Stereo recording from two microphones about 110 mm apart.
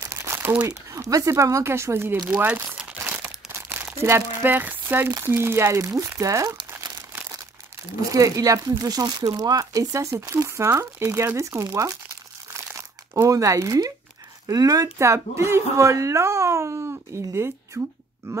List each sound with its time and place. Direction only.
0.0 s crumpling: 25° right (ahead or behind)
0.7 s speech: 30° right (ahead or behind)
2.2 s crumpling: 15° right (ahead or behind)
5.1 s speech: 20° right (ahead or behind)
6.7 s crumpling: 25° right (ahead or behind)
8.0 s speech: 30° right (ahead or behind)